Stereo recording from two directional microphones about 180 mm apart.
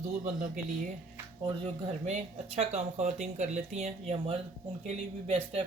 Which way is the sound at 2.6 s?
40° right (ahead or behind).